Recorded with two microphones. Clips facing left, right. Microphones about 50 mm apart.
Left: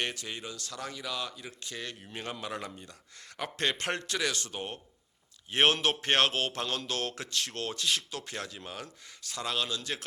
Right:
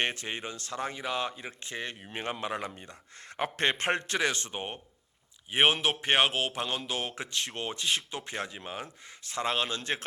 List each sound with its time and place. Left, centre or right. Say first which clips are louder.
0.0 s speech: right 3 dB; right
5.5 s speech: right 1 dB; centre; by 10.0 s right